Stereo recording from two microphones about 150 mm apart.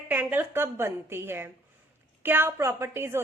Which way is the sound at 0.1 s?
10° right (ahead or behind).